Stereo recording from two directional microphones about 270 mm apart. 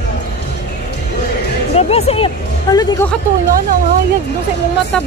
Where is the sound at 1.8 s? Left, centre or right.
Left.